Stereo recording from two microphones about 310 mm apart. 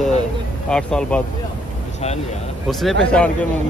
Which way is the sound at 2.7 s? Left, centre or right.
Centre.